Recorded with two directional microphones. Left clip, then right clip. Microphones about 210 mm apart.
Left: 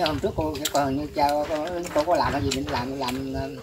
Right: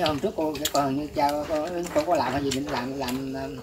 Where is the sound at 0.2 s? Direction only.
25° left (ahead or behind).